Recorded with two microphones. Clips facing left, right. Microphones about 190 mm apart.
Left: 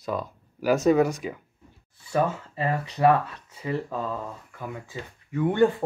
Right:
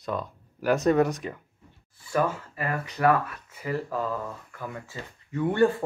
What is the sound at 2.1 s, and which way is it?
Speech, 25° left (ahead or behind).